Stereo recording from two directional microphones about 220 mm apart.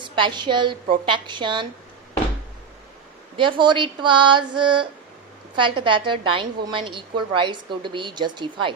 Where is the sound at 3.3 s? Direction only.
20° right (ahead or behind).